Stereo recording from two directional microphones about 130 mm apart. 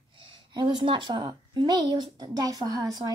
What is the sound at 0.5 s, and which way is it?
Speech, 35° right (ahead or behind).